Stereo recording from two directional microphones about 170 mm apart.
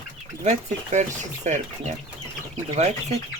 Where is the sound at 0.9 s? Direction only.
45° right (ahead or behind).